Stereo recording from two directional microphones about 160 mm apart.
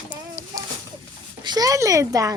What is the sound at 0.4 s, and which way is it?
Chicken, 15° right (ahead or behind).